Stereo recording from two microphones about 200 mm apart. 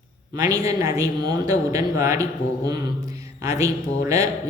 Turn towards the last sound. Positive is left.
turn(degrees=-15)  # may be behind; listen again after turning